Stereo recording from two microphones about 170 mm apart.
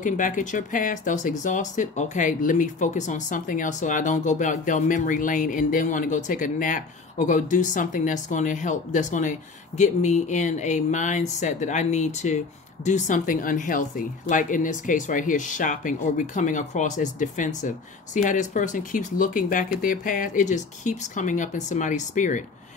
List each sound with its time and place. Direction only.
0.0 s speech: 50° left (ahead or behind)